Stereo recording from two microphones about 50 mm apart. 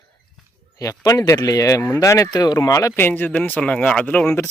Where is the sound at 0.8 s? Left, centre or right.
Left.